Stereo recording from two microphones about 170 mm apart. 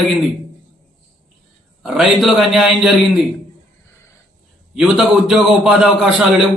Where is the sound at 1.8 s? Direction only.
Centre (ahead or behind).